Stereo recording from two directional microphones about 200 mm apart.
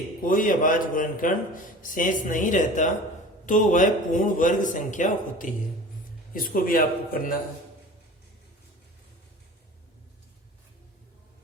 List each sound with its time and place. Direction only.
0.2 s speech: 40° left (ahead or behind)